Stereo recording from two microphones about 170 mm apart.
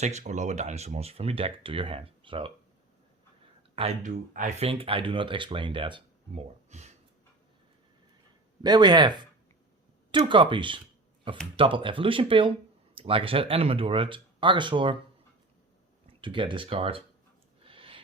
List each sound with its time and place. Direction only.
0.0 s speech: 40° right (ahead or behind)
3.8 s speech: 40° right (ahead or behind)
8.6 s speech: 25° right (ahead or behind)
16.2 s speech: 30° right (ahead or behind)
17.6 s a sound: 30° right (ahead or behind)